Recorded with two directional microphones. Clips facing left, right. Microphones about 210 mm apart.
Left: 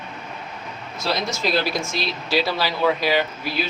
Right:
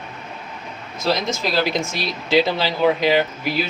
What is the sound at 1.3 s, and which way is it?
Speech, 20° right (ahead or behind).